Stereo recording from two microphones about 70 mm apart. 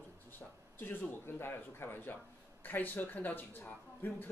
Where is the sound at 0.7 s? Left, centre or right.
Left.